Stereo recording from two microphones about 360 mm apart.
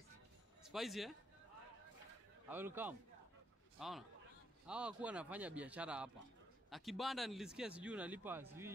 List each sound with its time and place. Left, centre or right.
0.6 s speech: centre
2.5 s speech: centre